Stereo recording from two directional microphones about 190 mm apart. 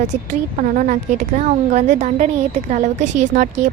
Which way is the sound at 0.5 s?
45° right (ahead or behind).